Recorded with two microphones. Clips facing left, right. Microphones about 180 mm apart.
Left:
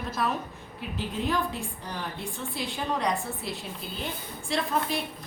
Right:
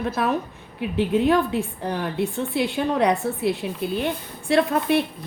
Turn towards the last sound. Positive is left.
turn(degrees=-65)  # may be behind; listen again after turning